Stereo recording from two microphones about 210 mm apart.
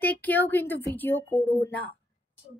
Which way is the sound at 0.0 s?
10° left (ahead or behind).